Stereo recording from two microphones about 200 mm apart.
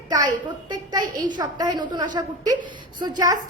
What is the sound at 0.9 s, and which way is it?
A woman's voice, 20° right (ahead or behind).